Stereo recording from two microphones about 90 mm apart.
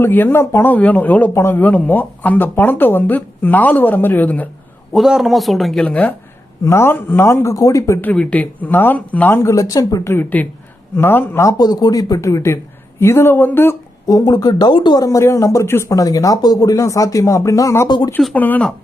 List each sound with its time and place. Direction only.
0.0 s speech: 20° left (ahead or behind)
1.3 s speech: 30° left (ahead or behind)
1.5 s speech: 15° left (ahead or behind)
4.9 s speech: 5° right (ahead or behind)
5.8 s speech: 15° left (ahead or behind)
6.7 s speech: 30° left (ahead or behind)
8.0 s speech: 15° left (ahead or behind)
9.4 s speech: 35° left (ahead or behind)
10.0 s speech: 25° left (ahead or behind)
11.5 s speech: 50° left (ahead or behind); by 13.7 s 25° left (ahead or behind)
14.1 s speech: 45° left (ahead or behind); by 15.0 s 60° left (ahead or behind)
15.0 s speech: 35° left (ahead or behind)
17.8 s speech: 55° left (ahead or behind)
18.3 s speech: 20° left (ahead or behind)